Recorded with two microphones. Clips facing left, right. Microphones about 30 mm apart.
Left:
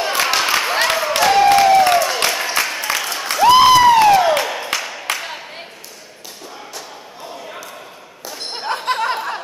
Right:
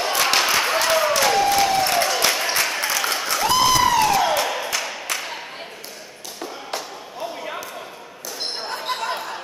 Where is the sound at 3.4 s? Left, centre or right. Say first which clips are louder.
Left 9 dB; left.